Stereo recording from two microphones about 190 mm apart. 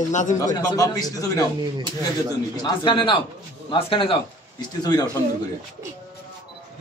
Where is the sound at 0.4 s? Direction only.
20° left (ahead or behind).